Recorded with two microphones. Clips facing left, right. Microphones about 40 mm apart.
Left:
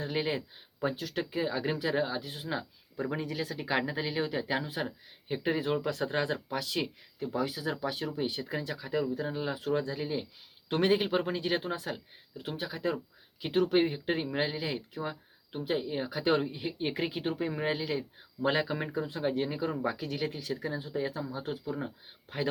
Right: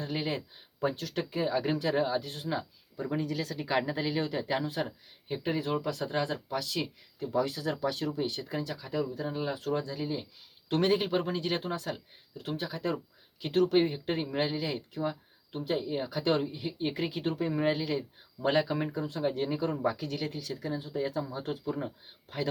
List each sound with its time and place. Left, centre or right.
0.0 s speech: centre
5.8 s speech: left
7.3 s speech: centre
9.3 s speech: centre
9.6 s speech: centre